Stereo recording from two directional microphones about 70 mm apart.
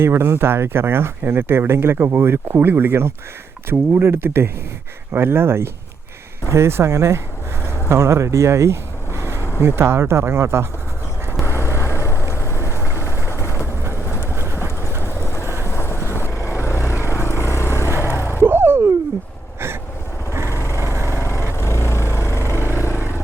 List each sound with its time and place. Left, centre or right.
0.0 s speech: right
11.4 s vehicle: left
14.3 s vehicle: right
15.0 s vehicle: left
18.3 s a sound: right
20.5 s vehicle: left
20.8 s lawn mower: right
21.2 s vehicle: left